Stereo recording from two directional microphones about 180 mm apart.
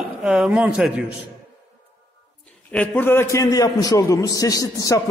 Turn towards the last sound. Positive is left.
turn(degrees=20)  # may be behind; listen again after turning